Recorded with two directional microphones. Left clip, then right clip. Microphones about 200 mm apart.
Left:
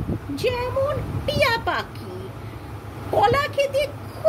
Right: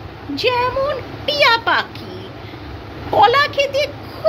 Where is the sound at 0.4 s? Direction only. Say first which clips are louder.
Right 6 dB; 10° left (ahead or behind).